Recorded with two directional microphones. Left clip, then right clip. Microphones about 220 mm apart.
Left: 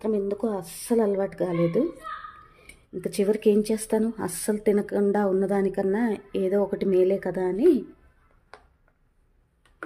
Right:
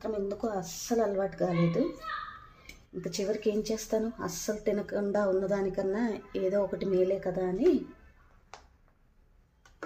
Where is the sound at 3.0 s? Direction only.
50° left (ahead or behind).